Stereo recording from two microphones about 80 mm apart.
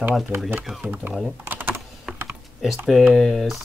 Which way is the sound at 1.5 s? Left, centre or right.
Right.